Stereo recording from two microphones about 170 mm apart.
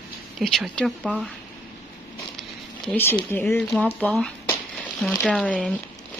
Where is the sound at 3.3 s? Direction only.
15° left (ahead or behind).